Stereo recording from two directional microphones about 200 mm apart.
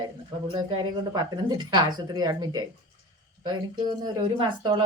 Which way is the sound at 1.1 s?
20° right (ahead or behind).